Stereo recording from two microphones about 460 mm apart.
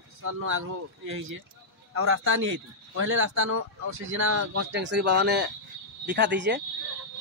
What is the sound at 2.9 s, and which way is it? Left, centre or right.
Speech, right.